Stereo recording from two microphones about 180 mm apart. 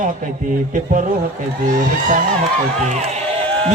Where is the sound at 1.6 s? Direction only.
45° right (ahead or behind).